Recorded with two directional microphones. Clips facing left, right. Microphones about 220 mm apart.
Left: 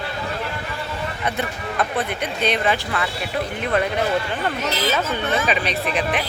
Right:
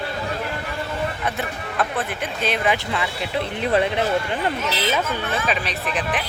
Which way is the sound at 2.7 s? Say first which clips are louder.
Even; 15° right (ahead or behind).